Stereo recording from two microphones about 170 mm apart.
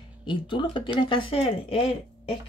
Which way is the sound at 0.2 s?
30° left (ahead or behind).